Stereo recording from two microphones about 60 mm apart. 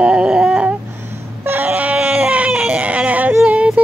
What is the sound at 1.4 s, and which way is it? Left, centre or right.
Baby cry, right.